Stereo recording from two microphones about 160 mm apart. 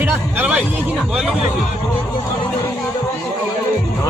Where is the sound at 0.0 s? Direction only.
10° right (ahead or behind).